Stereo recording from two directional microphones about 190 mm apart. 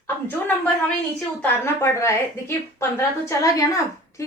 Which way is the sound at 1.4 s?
15° left (ahead or behind).